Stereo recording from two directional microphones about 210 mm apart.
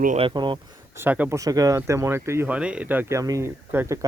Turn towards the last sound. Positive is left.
turn(degrees=-10)  # may be behind; listen again after turning